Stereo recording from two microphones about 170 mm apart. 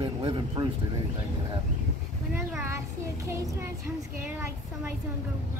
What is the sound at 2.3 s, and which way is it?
Speech, 10° right (ahead or behind).